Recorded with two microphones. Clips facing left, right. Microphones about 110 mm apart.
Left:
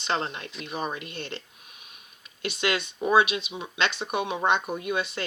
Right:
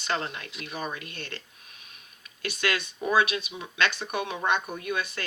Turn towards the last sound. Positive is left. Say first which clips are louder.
# left 3 dB
turn(degrees=20)  # may be behind; listen again after turning